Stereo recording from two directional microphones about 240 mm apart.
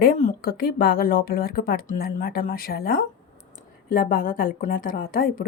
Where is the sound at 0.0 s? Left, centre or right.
Left.